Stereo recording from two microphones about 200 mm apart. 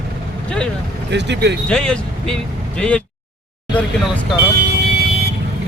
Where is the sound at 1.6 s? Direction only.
5° left (ahead or behind).